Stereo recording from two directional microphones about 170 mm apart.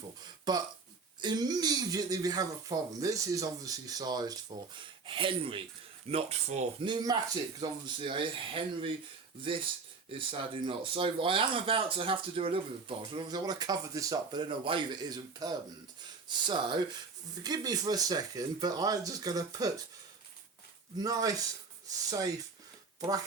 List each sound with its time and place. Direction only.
0.5 s speech: 25° right (ahead or behind); by 6.7 s 40° right (ahead or behind)
6.8 s speech: 25° right (ahead or behind)
10.1 s speech: 30° right (ahead or behind)
16.5 s speech: 25° right (ahead or behind)
21.0 s speech: 20° right (ahead or behind)